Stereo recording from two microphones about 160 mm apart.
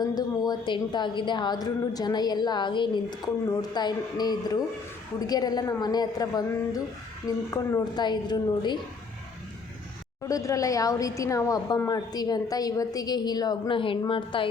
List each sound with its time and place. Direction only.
0.0 s a woman's voice: 25° left (ahead or behind)
10.2 s a woman's voice: 20° left (ahead or behind)